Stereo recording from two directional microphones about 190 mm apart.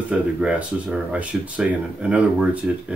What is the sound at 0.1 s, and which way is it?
Speech, 5° right (ahead or behind).